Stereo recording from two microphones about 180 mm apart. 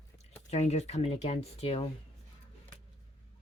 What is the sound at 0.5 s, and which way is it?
Speech, 40° left (ahead or behind).